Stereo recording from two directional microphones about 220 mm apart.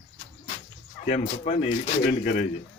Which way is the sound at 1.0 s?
30° left (ahead or behind).